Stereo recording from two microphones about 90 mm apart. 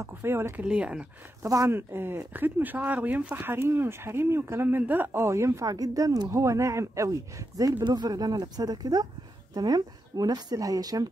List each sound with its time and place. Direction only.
0.0 s speech: 25° right (ahead or behind)
0.7 s speech: 10° right (ahead or behind)
1.4 s speech: 35° right (ahead or behind)